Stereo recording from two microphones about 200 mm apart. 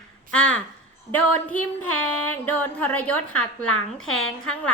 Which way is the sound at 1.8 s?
90° left.